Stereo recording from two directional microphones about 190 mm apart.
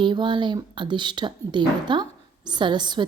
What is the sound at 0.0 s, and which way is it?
A woman's voice, 25° right (ahead or behind).